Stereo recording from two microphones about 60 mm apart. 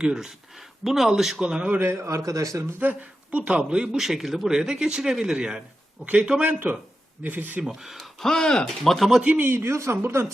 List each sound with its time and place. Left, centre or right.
0.0 s speech: centre
1.4 s speech: centre
1.9 s speech: right
2.8 s speech: right
3.9 s speech: centre
6.0 s speech: right
7.6 s speech: centre
9.4 s speech: right